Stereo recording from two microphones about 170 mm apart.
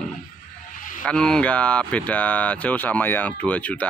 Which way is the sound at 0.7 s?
50° left (ahead or behind).